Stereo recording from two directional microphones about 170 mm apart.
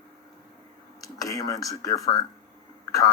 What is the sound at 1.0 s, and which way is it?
Speech, 20° left (ahead or behind).